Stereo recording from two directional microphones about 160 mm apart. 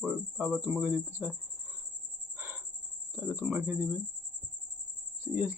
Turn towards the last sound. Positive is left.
turn(degrees=-10)  # may be behind; listen again after turning